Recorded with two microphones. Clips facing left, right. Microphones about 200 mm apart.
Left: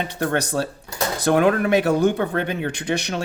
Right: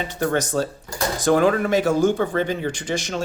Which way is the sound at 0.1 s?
60° left (ahead or behind).